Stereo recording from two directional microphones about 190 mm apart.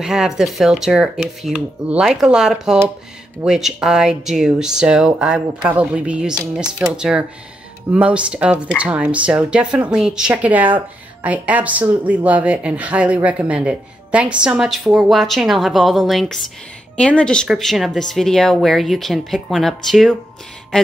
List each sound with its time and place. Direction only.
0.0 s speech: 5° right (ahead or behind)